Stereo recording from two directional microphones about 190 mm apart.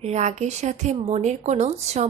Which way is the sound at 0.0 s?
35° right (ahead or behind).